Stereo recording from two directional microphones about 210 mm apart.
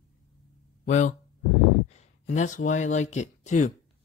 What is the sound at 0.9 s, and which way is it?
Speech, 35° left (ahead or behind).